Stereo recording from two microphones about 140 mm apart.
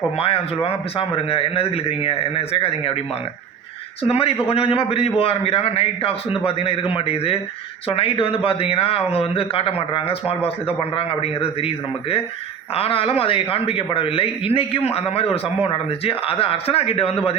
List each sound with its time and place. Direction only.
0.2 s a man's voice: 45° left (ahead or behind)
4.1 s a man's voice: 45° left (ahead or behind)